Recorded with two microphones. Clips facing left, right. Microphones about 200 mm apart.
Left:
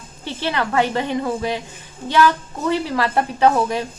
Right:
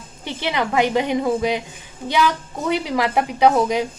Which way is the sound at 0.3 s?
15° right (ahead or behind).